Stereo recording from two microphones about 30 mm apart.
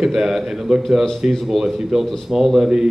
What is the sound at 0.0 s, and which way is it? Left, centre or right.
Speech, centre.